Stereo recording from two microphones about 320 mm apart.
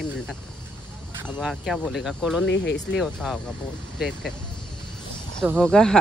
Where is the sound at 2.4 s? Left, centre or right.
Left.